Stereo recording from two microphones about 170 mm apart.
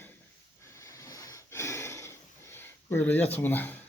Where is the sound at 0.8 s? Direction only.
20° left (ahead or behind).